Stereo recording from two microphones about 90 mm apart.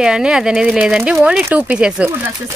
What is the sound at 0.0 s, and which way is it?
Speech, 5° right (ahead or behind).